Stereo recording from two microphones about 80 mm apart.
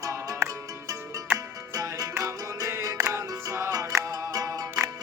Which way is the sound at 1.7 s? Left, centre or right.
Right.